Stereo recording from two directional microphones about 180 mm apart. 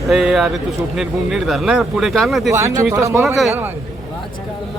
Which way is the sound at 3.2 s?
Centre (ahead or behind).